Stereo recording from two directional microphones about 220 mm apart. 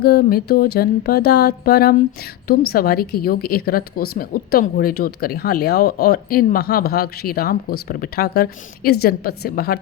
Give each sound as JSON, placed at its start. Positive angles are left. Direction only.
{"t": 0.0, "sound": "a woman's voice", "side_deg": 45}